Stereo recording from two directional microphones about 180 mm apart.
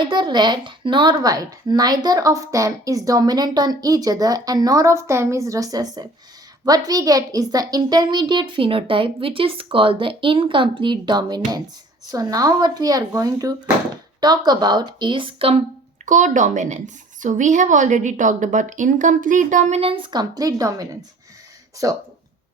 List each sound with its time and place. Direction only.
0.1 s speech: 25° right (ahead or behind)
16.0 s a woman's voice: 45° right (ahead or behind); by 22.0 s 20° right (ahead or behind)